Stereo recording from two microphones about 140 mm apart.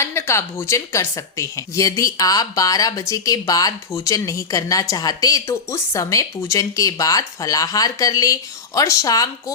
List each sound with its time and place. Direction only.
0.0 s speech: 20° left (ahead or behind)